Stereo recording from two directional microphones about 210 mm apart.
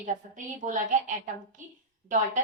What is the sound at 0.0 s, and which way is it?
A woman's voice, 35° right (ahead or behind).